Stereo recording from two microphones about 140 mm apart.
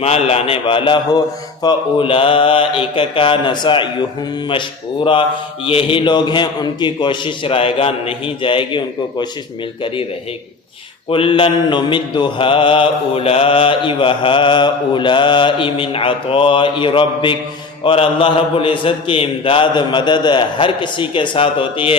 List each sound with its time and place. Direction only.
0.0 s a man's voice: 45° left (ahead or behind)
1.6 s mantra: 40° left (ahead or behind)
5.6 s mantra: 40° left (ahead or behind)
11.1 s mantra: 40° left (ahead or behind)